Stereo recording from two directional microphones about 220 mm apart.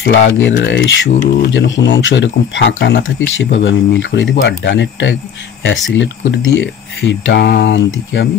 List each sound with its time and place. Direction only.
0.0 s speech: 55° left (ahead or behind)